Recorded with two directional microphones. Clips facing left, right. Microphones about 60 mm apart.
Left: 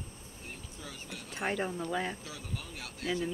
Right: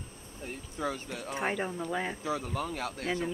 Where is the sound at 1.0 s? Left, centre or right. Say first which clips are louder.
Right 7 dB; right.